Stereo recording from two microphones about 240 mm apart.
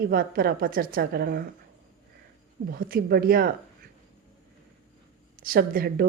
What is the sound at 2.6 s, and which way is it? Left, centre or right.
Speech, right.